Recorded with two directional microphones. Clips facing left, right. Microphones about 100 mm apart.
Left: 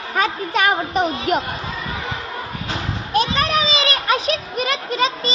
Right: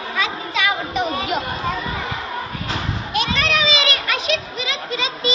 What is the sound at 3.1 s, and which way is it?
Children playing, 40° left (ahead or behind).